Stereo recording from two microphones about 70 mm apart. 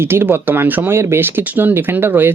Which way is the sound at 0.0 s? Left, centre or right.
Right.